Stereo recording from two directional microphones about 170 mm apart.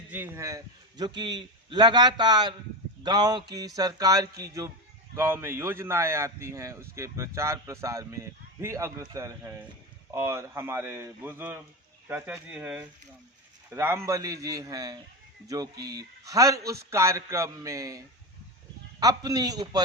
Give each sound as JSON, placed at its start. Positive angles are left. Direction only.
{"t": 0.1, "sound": "a man's voice", "side_deg": -15}